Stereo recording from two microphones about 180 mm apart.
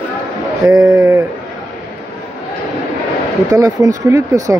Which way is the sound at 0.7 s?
15° right (ahead or behind).